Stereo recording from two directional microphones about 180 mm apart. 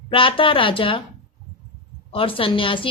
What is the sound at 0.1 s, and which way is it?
Speech, 30° left (ahead or behind).